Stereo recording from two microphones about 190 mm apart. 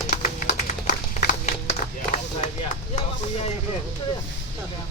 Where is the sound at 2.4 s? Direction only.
40° left (ahead or behind).